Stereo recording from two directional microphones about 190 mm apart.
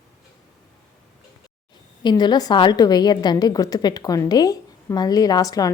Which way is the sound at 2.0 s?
20° left (ahead or behind).